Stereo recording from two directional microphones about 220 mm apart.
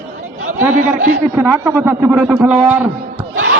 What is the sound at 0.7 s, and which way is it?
Speech, 35° right (ahead or behind).